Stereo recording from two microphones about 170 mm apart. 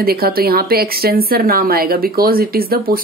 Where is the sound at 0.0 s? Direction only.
65° right (ahead or behind).